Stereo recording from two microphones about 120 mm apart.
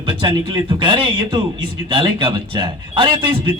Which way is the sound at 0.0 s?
45° right (ahead or behind).